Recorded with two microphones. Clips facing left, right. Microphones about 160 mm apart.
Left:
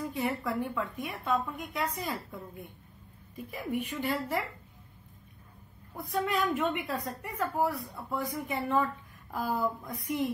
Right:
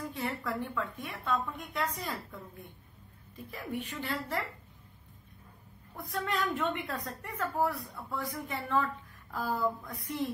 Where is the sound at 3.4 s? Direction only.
10° left (ahead or behind).